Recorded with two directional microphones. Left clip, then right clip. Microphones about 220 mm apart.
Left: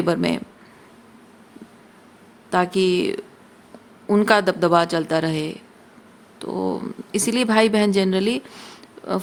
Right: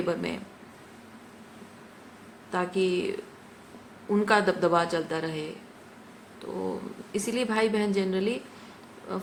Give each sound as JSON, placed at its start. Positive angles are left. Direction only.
{"t": 0.0, "sound": "speech", "side_deg": 55}
{"t": 2.5, "sound": "speech", "side_deg": 55}